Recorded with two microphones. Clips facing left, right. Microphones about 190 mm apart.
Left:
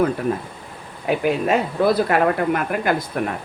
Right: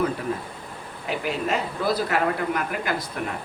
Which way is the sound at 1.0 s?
55° left (ahead or behind).